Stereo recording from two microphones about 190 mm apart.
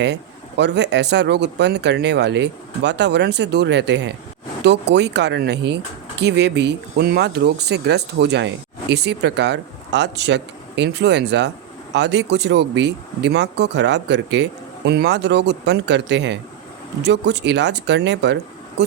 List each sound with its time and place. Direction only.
0.0 s speech: 65° right (ahead or behind)